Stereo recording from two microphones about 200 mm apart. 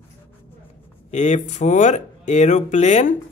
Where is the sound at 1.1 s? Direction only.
35° left (ahead or behind).